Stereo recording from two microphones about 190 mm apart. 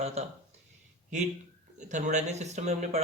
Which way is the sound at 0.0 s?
35° right (ahead or behind).